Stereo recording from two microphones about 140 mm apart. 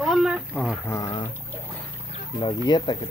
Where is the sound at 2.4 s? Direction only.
30° left (ahead or behind).